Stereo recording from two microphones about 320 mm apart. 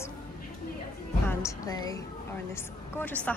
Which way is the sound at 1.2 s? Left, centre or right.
Centre.